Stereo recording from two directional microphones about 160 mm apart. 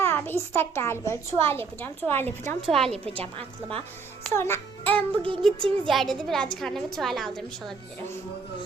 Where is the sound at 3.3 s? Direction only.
35° right (ahead or behind).